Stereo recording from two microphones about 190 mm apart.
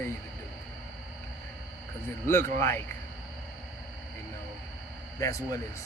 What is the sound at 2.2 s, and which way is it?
Speech, 10° left (ahead or behind).